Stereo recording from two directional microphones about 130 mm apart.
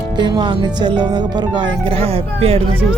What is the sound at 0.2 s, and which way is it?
Speech, 35° right (ahead or behind).